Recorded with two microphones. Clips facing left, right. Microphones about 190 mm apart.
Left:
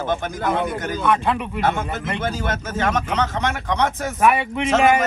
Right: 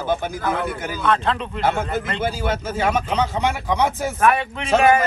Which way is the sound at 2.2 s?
10° right (ahead or behind).